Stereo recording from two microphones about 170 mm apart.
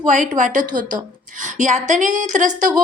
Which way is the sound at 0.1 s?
50° right (ahead or behind).